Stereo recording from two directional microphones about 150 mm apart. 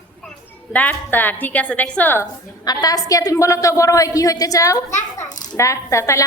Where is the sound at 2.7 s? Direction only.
25° left (ahead or behind).